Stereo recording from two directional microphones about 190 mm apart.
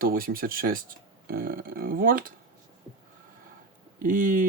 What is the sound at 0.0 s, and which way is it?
Speech, 50° right (ahead or behind).